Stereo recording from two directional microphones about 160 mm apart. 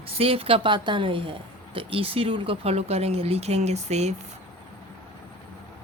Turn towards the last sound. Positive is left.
turn(degrees=-45)  # may be behind; listen again after turning